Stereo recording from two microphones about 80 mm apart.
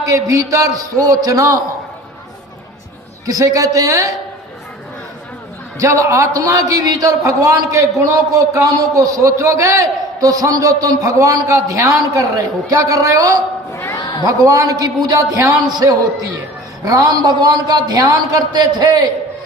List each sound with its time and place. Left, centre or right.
0.0 s a man's voice: right
3.2 s a man's voice: right
5.8 s a man's voice: right
13.7 s a sound: left
14.3 s a man's voice: right